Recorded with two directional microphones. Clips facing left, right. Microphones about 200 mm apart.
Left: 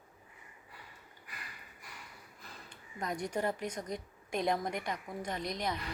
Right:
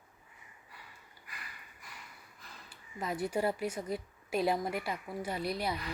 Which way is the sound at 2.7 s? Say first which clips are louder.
Right 1 dB; 5° right (ahead or behind).